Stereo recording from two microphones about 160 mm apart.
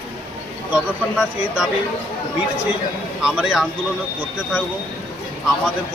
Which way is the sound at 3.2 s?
5° right (ahead or behind).